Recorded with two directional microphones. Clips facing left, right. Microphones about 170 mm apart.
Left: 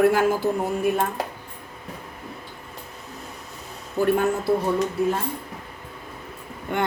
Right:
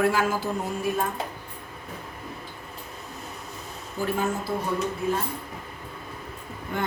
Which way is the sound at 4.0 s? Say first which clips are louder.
Left 8 dB; 60° left (ahead or behind).